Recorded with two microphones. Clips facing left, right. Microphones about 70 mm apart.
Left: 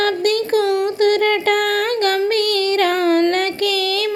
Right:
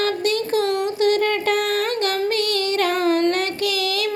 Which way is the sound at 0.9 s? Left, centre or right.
Left.